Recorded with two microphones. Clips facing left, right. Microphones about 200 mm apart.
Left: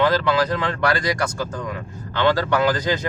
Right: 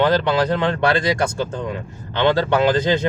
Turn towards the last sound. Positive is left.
turn(degrees=-25)  # may be behind; listen again after turning